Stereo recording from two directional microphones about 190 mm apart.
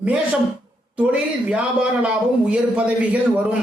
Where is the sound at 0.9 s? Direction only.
5° right (ahead or behind).